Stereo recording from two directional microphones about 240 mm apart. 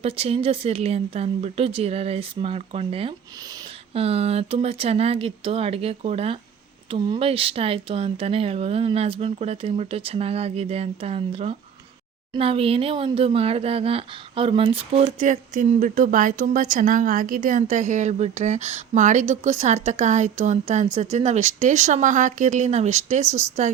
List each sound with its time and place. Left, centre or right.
0.0 s speech: right